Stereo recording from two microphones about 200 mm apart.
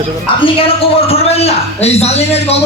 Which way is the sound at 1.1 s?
30° left (ahead or behind).